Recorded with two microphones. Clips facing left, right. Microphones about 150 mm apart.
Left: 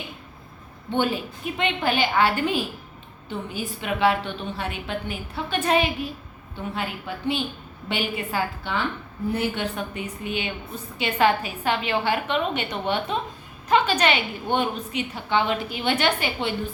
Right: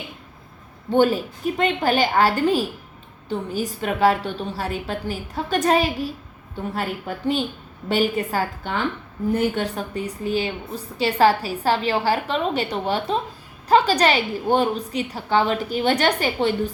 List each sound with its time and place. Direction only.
0.9 s a woman's voice: 40° right (ahead or behind)